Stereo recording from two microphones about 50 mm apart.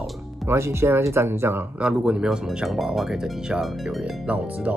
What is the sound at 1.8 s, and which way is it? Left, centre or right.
Speech, centre.